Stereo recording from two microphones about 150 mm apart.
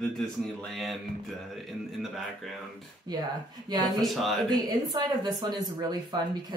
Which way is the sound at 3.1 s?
25° right (ahead or behind).